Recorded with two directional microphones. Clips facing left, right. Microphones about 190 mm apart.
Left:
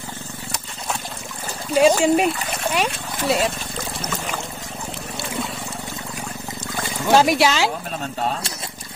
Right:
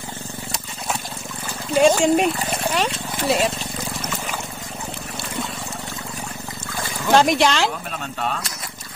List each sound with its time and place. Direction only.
1.8 s speech: 5° left (ahead or behind)
7.1 s speech: 5° left (ahead or behind)
8.2 s speech: 30° left (ahead or behind)